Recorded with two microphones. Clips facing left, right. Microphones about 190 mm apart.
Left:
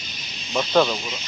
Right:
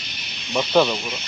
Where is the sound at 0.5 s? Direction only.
10° right (ahead or behind).